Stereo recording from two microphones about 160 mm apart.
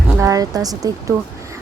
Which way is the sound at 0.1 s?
20° right (ahead or behind).